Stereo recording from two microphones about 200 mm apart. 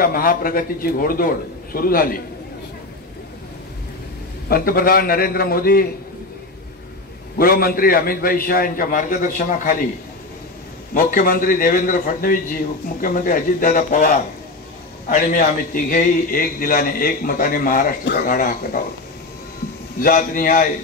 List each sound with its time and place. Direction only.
0.0 s a man's voice: 45° left (ahead or behind)
4.5 s a man's voice: 45° left (ahead or behind)
7.3 s a man's voice: 45° left (ahead or behind)
10.9 s a man's voice: 45° left (ahead or behind)
20.0 s a man's voice: 45° left (ahead or behind)